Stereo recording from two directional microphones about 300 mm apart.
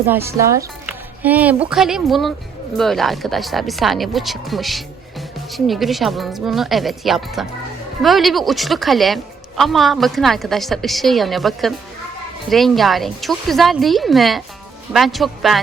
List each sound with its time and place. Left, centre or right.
0.1 s a woman's voice: centre